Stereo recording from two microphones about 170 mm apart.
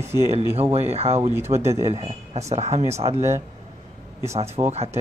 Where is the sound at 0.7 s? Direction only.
35° right (ahead or behind).